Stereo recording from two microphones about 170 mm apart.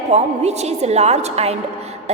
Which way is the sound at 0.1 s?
40° right (ahead or behind).